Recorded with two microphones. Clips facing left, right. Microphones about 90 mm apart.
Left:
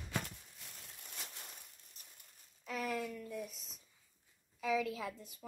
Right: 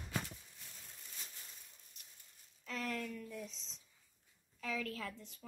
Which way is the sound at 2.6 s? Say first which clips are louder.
Left 3 dB; 10° left (ahead or behind).